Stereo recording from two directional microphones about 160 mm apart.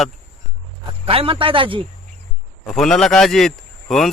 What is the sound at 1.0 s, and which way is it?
Speech, 35° right (ahead or behind).